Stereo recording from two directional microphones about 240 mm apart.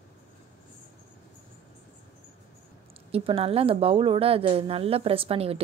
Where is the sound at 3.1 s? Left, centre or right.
Right.